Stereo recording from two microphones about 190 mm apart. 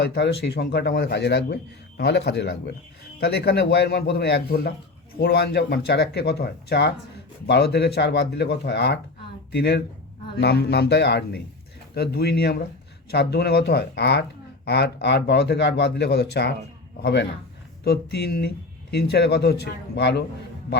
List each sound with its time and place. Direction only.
0.0 s speech: 65° left (ahead or behind)